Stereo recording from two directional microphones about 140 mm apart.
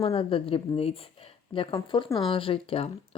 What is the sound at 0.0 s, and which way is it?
A woman's voice, 45° left (ahead or behind).